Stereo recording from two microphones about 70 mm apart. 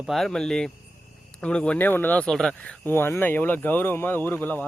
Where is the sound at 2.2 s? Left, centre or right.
Centre.